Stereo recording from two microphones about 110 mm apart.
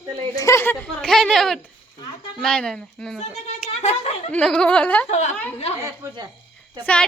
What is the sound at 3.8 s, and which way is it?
Speech, 85° left.